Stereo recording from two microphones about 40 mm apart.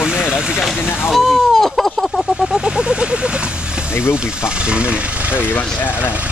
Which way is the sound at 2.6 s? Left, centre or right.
Right.